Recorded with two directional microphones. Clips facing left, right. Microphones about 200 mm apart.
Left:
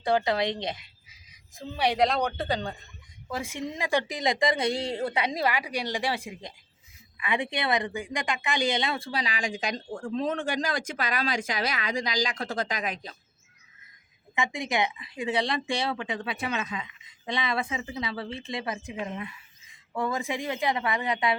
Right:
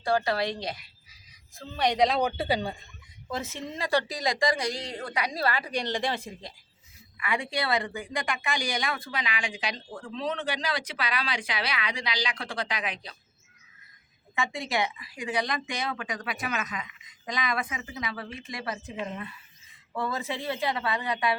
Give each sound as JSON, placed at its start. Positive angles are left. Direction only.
{"t": 0.0, "sound": "speech", "side_deg": 20}
{"t": 3.2, "sound": "a woman's voice", "side_deg": 10}
{"t": 14.3, "sound": "speech", "side_deg": 15}
{"t": 18.9, "sound": "speech", "side_deg": 5}